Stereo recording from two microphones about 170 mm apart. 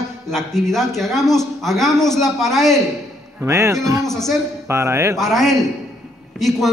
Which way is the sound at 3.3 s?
15° right (ahead or behind).